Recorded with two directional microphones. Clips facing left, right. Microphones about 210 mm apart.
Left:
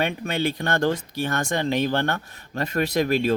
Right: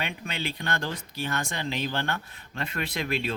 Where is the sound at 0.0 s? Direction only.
45° left (ahead or behind).